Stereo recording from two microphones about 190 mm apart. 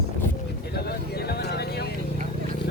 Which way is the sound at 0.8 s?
55° left (ahead or behind).